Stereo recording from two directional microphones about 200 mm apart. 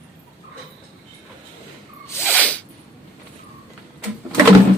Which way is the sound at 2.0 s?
10° left (ahead or behind).